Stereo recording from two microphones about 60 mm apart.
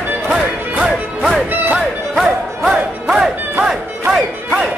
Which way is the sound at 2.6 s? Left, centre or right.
Centre.